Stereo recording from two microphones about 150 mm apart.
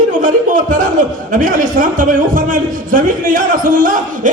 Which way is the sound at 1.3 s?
60° right (ahead or behind).